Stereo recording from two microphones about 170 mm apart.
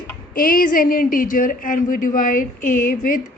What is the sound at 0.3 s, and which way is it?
A woman's voice, 55° left (ahead or behind).